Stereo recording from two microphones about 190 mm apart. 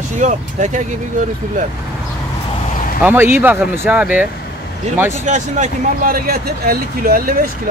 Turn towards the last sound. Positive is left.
turn(degrees=-50)  # may be behind; listen again after turning